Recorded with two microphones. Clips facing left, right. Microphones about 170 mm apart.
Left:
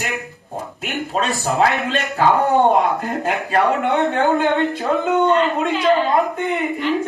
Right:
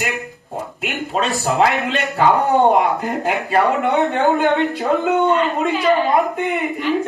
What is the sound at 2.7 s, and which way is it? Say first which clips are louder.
Speech: right 1 dB; 15° right (ahead or behind).